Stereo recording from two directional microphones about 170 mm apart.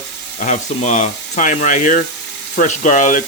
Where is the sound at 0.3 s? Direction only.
45° left (ahead or behind).